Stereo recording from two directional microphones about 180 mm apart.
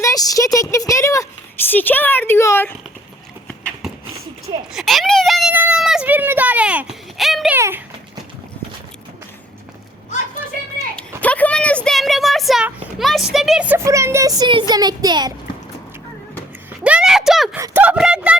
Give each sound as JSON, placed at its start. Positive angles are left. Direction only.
{"t": 0.0, "sound": "speech", "side_deg": 20}
{"t": 4.7, "sound": "a child's voice", "side_deg": 0}
{"t": 7.5, "sound": "speech", "side_deg": -10}
{"t": 11.2, "sound": "speech", "side_deg": 10}
{"t": 16.8, "sound": "a sound", "side_deg": -5}
{"t": 17.6, "sound": "speech", "side_deg": -10}